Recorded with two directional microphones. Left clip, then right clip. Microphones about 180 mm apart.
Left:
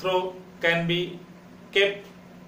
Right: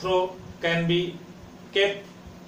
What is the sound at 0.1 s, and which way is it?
A man's voice, 20° left (ahead or behind).